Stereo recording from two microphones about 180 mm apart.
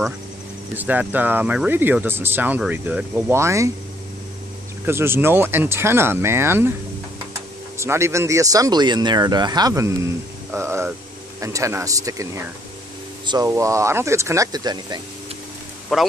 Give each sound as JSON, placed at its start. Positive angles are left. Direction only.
{"t": 0.7, "sound": "speech", "side_deg": -10}
{"t": 4.8, "sound": "speech", "side_deg": -15}
{"t": 7.7, "sound": "speech", "side_deg": -15}
{"t": 15.9, "sound": "speech", "side_deg": 0}